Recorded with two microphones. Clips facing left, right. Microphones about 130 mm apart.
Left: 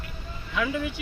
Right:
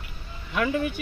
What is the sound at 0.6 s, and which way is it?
Speech, 50° right (ahead or behind).